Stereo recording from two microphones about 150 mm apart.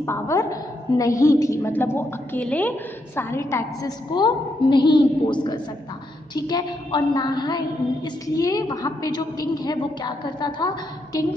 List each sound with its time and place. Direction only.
0.0 s a woman's voice: 20° left (ahead or behind)